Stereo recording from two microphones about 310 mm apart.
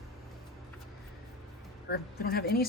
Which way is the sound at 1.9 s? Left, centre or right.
Left.